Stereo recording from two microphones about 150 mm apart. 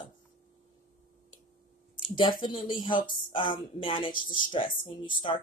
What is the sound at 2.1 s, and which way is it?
Speech, 30° left (ahead or behind).